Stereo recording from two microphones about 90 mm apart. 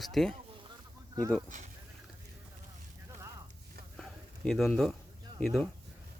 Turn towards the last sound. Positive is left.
turn(degrees=5)  # may be behind; listen again after turning